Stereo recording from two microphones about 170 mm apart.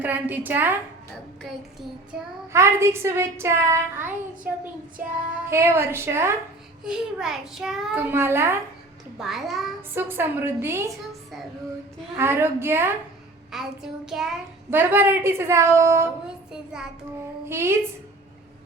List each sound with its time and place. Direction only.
0.0 s a child's voice: 10° right (ahead or behind)
2.5 s a child's voice: 15° right (ahead or behind)
5.5 s a child's voice: 15° right (ahead or behind)
6.8 s a child's voice: 5° right (ahead or behind)
9.1 s a child's voice: centre (ahead or behind)
9.9 s a child's voice: 15° right (ahead or behind)
12.1 s a child's voice: 15° right (ahead or behind)
13.5 s a child's voice: centre (ahead or behind)
16.5 s a child's voice: 5° right (ahead or behind)
17.5 s a child's voice: 15° right (ahead or behind)